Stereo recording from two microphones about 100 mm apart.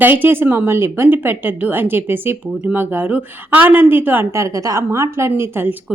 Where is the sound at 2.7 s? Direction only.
20° right (ahead or behind).